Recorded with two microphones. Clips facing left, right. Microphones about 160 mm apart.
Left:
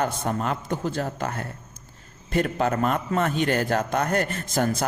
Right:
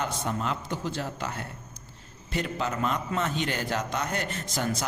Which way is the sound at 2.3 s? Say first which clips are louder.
Left 7 dB; 55° left (ahead or behind).